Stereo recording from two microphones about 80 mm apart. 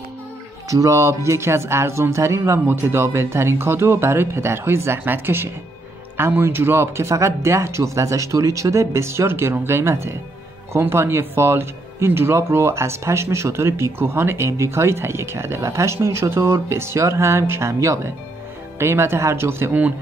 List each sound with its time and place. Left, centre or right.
0.7 s speech: right